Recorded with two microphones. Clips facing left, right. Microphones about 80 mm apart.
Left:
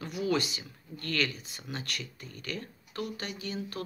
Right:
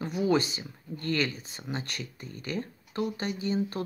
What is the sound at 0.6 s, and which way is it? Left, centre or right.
Speech, right.